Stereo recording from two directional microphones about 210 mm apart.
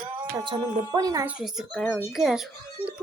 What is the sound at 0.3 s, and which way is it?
Speech, 20° right (ahead or behind).